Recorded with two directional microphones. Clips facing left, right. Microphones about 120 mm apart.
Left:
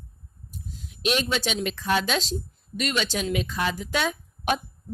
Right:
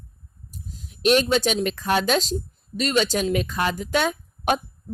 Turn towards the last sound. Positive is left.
turn(degrees=-45)  # may be behind; listen again after turning